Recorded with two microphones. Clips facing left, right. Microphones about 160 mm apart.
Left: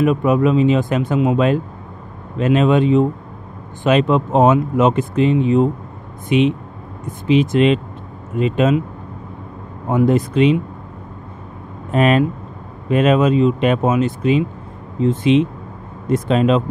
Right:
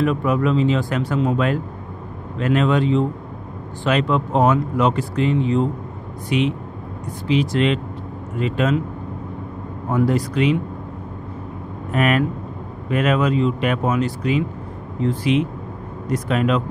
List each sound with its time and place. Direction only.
0.0 s speech: 20° left (ahead or behind)
9.8 s speech: 20° left (ahead or behind)
11.9 s speech: 25° left (ahead or behind)